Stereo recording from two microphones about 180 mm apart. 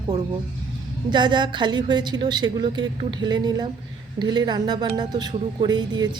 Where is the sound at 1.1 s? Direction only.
25° right (ahead or behind).